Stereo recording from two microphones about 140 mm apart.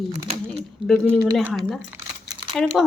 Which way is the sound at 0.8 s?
5° left (ahead or behind).